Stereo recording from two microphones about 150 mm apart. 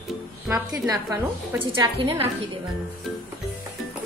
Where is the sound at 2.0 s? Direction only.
40° right (ahead or behind).